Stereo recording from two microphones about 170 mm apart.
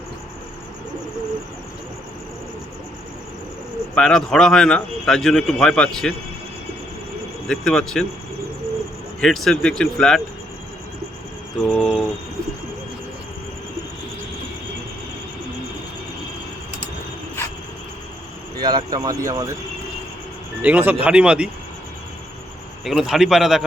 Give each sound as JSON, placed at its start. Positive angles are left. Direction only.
{"t": 3.9, "sound": "speech", "side_deg": 5}
{"t": 7.4, "sound": "speech", "side_deg": 5}
{"t": 9.2, "sound": "speech", "side_deg": 0}
{"t": 11.6, "sound": "speech", "side_deg": 0}
{"t": 17.4, "sound": "a sound", "side_deg": 15}
{"t": 18.6, "sound": "speech", "side_deg": -25}
{"t": 20.6, "sound": "speech", "side_deg": -10}
{"t": 22.8, "sound": "speech", "side_deg": 0}